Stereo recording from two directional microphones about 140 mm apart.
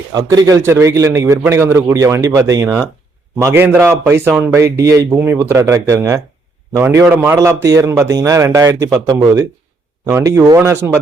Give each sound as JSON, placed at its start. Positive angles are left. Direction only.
{"t": 0.1, "sound": "a man's voice", "side_deg": -30}